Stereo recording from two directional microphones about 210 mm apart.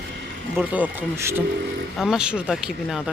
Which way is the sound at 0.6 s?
5° right (ahead or behind).